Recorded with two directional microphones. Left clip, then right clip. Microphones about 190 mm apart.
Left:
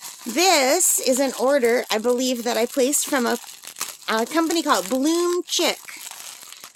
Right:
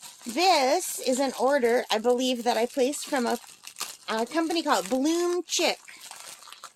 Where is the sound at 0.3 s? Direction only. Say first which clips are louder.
Left 4 dB; 45° left (ahead or behind); by 5.7 s 25° left (ahead or behind).